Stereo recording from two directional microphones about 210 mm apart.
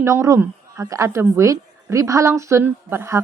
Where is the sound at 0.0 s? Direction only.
15° right (ahead or behind).